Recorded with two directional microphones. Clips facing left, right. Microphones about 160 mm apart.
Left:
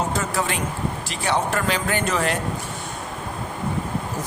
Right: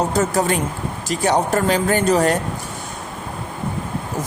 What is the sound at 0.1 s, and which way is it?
A woman's voice, 40° right (ahead or behind).